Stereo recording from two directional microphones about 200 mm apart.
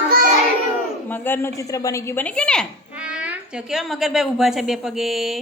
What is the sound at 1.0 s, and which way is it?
A woman's voice, 10° left (ahead or behind).